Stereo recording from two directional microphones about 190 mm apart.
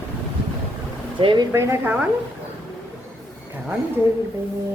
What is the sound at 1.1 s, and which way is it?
Speech, 25° right (ahead or behind).